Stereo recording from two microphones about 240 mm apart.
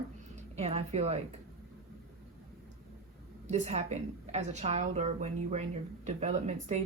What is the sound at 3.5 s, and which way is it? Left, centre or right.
A woman's voice, right.